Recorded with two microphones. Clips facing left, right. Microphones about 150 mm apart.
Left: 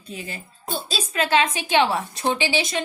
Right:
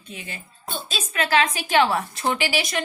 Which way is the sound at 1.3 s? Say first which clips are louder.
Even; 25° left (ahead or behind).